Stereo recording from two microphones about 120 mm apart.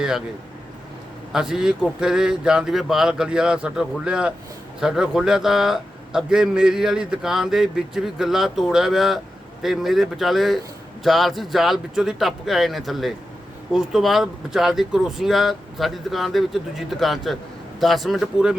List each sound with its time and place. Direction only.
1.3 s a man's voice: 5° right (ahead or behind)